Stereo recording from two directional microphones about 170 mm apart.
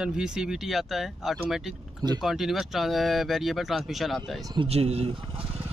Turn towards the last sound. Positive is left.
turn(degrees=-35)  # may be behind; listen again after turning